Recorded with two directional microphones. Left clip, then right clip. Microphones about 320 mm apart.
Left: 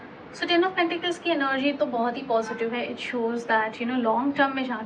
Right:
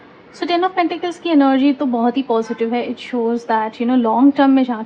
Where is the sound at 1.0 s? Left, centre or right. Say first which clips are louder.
Right 9 dB; centre.